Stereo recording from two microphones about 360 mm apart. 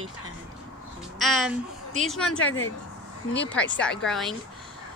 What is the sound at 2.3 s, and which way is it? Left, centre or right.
Speech, left.